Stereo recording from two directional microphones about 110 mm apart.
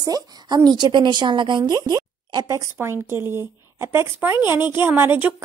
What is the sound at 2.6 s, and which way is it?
A woman's voice, 20° right (ahead or behind).